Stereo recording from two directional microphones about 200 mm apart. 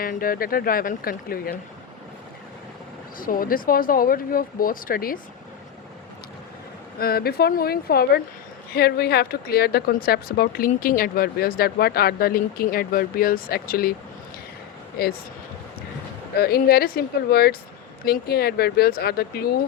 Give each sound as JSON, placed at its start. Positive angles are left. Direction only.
{"t": 0.0, "sound": "speech", "side_deg": 45}
{"t": 3.2, "sound": "speech", "side_deg": 45}
{"t": 7.0, "sound": "speech", "side_deg": 50}
{"t": 15.0, "sound": "speech", "side_deg": 50}
{"t": 16.4, "sound": "speech", "side_deg": 50}